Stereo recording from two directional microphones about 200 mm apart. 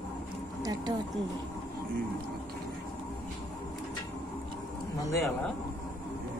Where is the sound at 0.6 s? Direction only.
20° right (ahead or behind).